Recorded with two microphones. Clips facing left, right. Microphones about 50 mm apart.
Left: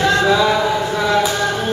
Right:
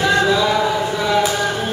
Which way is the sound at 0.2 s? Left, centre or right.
Centre.